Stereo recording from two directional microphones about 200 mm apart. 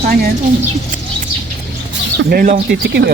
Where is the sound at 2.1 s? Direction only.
45° right (ahead or behind).